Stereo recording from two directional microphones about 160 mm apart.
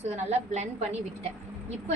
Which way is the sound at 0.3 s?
45° right (ahead or behind).